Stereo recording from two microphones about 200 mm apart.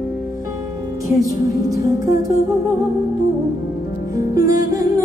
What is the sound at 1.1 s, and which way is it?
Music, 15° right (ahead or behind).